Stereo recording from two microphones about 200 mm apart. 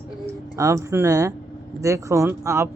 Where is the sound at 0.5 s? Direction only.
15° right (ahead or behind).